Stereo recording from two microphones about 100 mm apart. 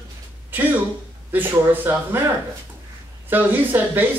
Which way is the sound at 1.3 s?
20° right (ahead or behind).